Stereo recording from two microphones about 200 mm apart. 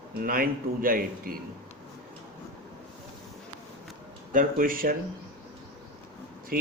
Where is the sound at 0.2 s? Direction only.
45° right (ahead or behind).